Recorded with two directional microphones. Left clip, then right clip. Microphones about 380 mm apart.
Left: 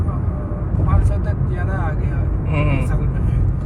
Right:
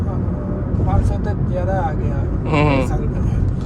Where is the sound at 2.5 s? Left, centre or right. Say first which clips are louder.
Right 7 dB; right.